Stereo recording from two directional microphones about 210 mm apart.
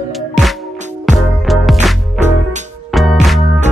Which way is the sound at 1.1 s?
Centre (ahead or behind).